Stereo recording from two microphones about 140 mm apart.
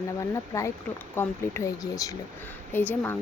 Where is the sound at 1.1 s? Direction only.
20° left (ahead or behind).